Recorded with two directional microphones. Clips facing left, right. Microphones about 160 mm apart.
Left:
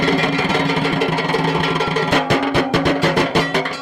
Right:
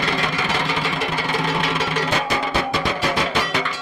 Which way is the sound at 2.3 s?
65° left (ahead or behind).